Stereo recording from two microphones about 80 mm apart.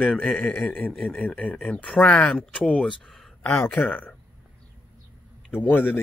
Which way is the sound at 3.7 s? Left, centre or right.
Centre.